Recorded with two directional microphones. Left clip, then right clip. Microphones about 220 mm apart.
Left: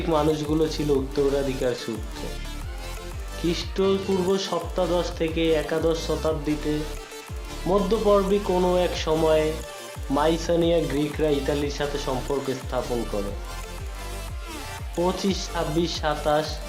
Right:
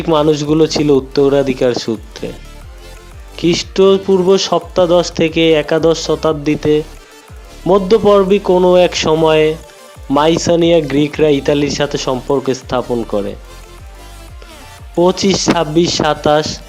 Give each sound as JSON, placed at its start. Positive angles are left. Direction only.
{"t": 0.1, "sound": "speech", "side_deg": -40}
{"t": 3.4, "sound": "speech", "side_deg": -40}
{"t": 7.7, "sound": "speech", "side_deg": -40}
{"t": 15.0, "sound": "speech", "side_deg": -40}